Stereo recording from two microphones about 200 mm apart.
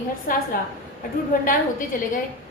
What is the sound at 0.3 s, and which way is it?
A woman's voice, 45° left (ahead or behind).